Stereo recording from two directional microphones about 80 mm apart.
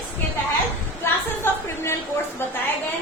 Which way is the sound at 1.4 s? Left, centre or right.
Left.